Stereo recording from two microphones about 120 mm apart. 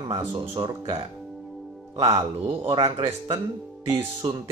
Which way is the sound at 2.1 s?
50° right (ahead or behind).